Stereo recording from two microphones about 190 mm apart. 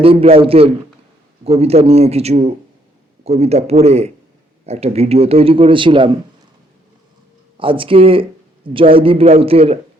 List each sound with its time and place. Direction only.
0.0 s a man's voice: 30° right (ahead or behind)
7.6 s a man's voice: 25° right (ahead or behind)